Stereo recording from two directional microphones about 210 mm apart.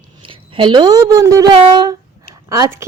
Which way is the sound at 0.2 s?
25° right (ahead or behind).